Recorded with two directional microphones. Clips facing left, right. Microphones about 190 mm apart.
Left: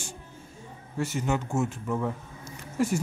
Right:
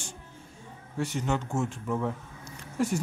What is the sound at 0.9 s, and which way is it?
A man's voice, 5° left (ahead or behind).